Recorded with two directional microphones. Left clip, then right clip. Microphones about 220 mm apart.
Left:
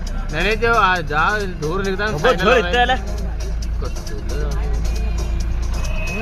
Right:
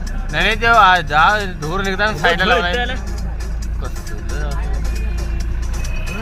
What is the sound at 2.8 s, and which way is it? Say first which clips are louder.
Speech: left 6 dB; 35° left (ahead or behind).